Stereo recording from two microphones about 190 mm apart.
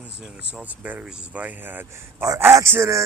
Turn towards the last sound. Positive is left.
turn(degrees=-15)  # may be behind; listen again after turning